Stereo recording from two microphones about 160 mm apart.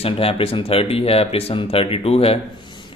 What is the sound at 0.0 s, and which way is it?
Speech, 35° left (ahead or behind).